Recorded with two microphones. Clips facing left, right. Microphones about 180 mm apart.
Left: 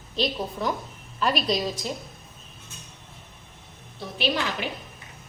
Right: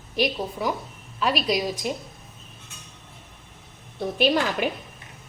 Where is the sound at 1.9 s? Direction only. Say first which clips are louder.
Right 4 dB; 15° right (ahead or behind).